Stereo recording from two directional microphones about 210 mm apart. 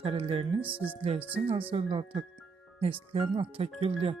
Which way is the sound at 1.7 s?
25° right (ahead or behind).